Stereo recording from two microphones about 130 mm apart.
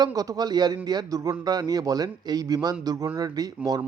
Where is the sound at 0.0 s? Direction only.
30° right (ahead or behind).